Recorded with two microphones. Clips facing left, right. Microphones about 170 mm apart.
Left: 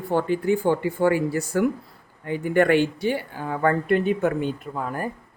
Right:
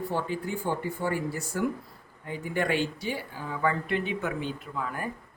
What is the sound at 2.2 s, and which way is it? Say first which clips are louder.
Speech: left 9 dB; 65° left (ahead or behind).